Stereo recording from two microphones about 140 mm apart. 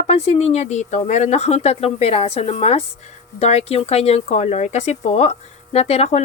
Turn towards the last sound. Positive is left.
turn(degrees=50)  # may be behind; listen again after turning